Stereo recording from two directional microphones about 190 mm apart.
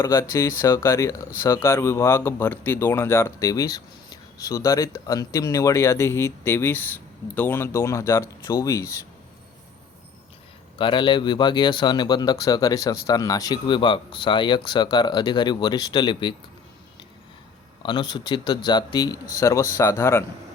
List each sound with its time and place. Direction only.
0.0 s speech: 15° left (ahead or behind)
10.8 s speech: 25° left (ahead or behind)
17.8 s speech: 25° left (ahead or behind)